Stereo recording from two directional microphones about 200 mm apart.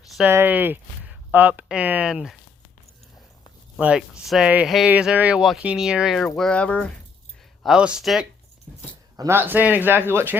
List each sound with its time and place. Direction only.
0.1 s a sound: 5° right (ahead or behind)
0.3 s speech: 10° right (ahead or behind)
3.8 s speech: 5° right (ahead or behind)
9.1 s speech: 15° right (ahead or behind)